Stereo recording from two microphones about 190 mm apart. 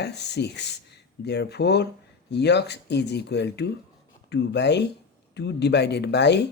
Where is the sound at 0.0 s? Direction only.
60° left (ahead or behind).